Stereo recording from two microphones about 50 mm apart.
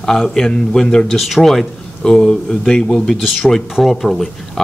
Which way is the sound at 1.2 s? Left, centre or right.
Centre.